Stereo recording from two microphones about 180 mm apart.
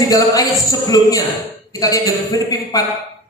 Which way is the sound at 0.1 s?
20° left (ahead or behind).